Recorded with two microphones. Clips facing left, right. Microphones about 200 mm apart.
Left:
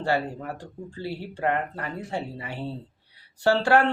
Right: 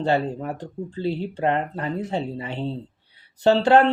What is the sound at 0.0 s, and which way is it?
Speech, 20° right (ahead or behind).